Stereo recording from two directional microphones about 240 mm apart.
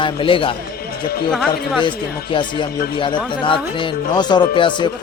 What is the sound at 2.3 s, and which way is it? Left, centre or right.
Speech, centre.